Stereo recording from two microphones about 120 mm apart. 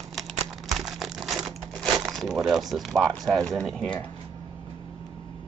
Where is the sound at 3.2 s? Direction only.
Centre (ahead or behind).